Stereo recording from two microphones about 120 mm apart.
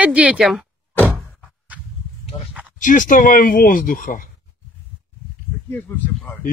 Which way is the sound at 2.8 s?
90° left.